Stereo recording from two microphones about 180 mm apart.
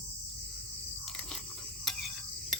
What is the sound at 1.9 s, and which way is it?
Stir, centre (ahead or behind).